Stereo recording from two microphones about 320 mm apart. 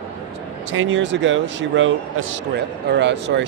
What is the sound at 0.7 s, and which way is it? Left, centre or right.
A man's voice, right.